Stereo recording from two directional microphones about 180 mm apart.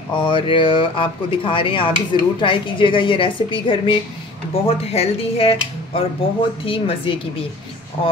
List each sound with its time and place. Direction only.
0.1 s speech: 25° left (ahead or behind)